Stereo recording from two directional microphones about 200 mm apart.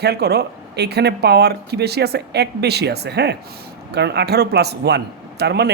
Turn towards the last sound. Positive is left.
turn(degrees=-55)  # may be behind; listen again after turning